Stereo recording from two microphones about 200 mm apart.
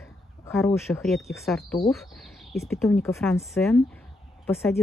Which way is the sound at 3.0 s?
15° left (ahead or behind).